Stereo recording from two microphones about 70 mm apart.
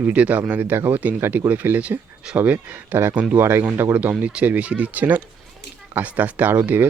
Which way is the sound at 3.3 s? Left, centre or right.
Right.